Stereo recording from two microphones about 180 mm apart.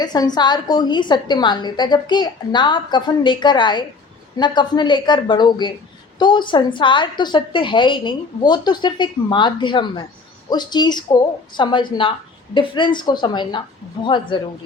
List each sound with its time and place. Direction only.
0.0 s a woman's voice: 25° left (ahead or behind)